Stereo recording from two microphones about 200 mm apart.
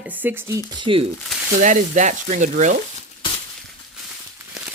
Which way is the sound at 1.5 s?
40° right (ahead or behind).